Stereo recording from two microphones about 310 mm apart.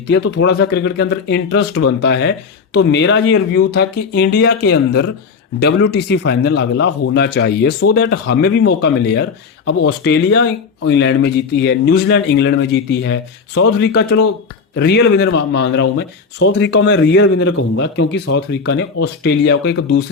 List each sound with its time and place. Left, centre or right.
0.1 s a man's voice: left